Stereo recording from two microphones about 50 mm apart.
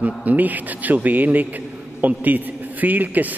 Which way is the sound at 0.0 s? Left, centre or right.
Right.